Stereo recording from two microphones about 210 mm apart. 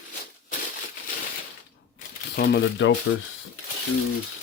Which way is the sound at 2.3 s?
50° left (ahead or behind).